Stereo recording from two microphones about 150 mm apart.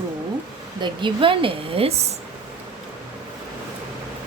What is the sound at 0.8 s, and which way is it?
Speech, 35° right (ahead or behind).